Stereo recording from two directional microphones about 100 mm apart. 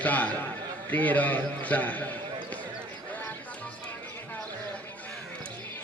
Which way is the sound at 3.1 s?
15° left (ahead or behind).